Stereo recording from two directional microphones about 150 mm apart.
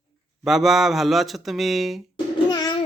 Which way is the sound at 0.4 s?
Centre (ahead or behind).